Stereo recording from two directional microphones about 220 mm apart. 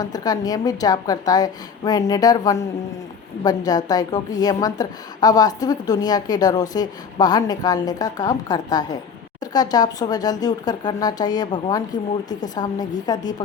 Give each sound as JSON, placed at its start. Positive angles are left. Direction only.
{"t": 0.0, "sound": "a woman's voice", "side_deg": 15}